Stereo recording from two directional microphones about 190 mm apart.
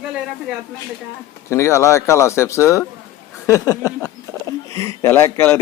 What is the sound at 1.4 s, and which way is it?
A man's voice, 15° left (ahead or behind).